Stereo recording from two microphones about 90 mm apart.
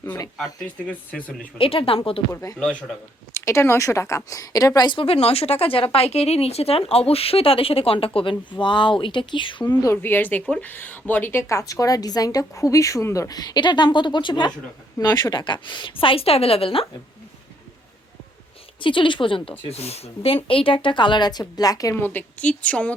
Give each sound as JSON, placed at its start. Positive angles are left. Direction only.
{"t": 0.9, "sound": "a woman's voice", "side_deg": 15}
{"t": 1.5, "sound": "speech", "side_deg": 90}
{"t": 2.3, "sound": "a woman's voice", "side_deg": 40}
{"t": 4.9, "sound": "speech", "side_deg": 80}
{"t": 8.6, "sound": "a woman's voice", "side_deg": 60}
{"t": 9.8, "sound": "a woman's voice", "side_deg": 25}
{"t": 18.8, "sound": "a woman's voice", "side_deg": 70}
{"t": 21.9, "sound": "a woman's voice", "side_deg": 25}